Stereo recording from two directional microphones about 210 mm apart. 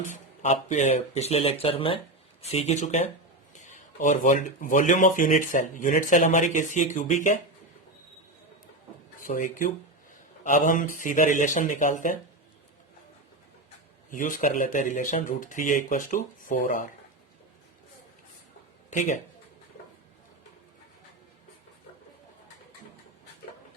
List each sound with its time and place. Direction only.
0.0 s speech: 35° left (ahead or behind)
9.2 s speech: 40° left (ahead or behind)
14.1 s speech: 40° left (ahead or behind)
18.9 s speech: 35° left (ahead or behind)